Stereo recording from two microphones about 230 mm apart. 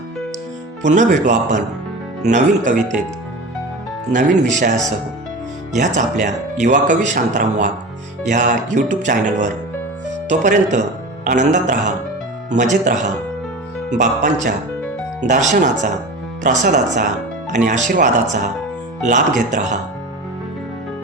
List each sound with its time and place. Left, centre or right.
0.9 s speech: right
4.1 s speech: right
5.7 s speech: right